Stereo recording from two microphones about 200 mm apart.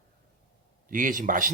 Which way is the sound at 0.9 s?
40° right (ahead or behind).